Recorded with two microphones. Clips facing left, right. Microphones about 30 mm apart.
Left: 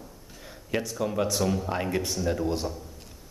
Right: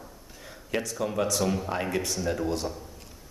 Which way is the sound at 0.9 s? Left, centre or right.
Centre.